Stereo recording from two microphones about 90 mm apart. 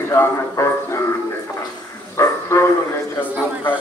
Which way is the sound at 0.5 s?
35° left (ahead or behind).